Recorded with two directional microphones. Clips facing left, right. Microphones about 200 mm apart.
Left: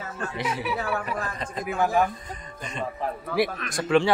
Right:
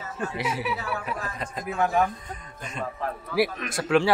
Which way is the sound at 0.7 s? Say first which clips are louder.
Left 4 dB; 55° left (ahead or behind).